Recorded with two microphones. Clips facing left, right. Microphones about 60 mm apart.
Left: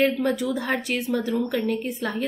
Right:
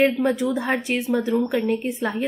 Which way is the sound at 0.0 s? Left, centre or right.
Centre.